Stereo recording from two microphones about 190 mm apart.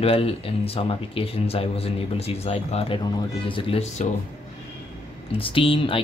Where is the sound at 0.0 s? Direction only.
30° left (ahead or behind).